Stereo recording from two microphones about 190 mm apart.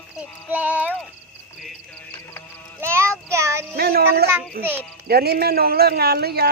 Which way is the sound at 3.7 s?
55° right (ahead or behind).